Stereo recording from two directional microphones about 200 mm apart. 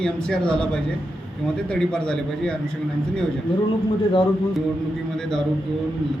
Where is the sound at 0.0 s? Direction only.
5° left (ahead or behind).